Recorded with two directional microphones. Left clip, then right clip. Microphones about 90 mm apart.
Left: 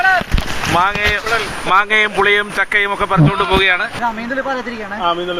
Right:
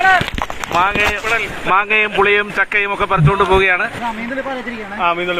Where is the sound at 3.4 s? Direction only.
15° right (ahead or behind).